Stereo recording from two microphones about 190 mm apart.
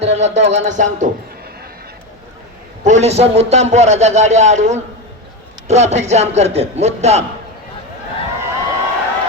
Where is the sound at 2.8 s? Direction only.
35° right (ahead or behind).